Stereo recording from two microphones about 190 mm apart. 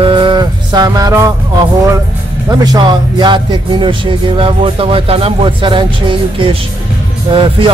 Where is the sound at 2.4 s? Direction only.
20° right (ahead or behind).